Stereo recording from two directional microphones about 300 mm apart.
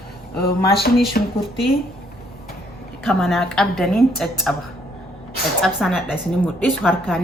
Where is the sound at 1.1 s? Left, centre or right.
Left.